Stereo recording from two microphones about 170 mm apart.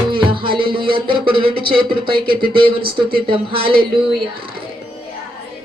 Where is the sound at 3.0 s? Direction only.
60° right (ahead or behind).